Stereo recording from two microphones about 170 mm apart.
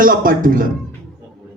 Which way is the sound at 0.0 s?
55° right (ahead or behind).